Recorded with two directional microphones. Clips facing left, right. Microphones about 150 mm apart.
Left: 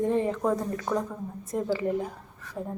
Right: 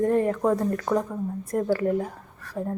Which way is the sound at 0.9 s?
15° right (ahead or behind).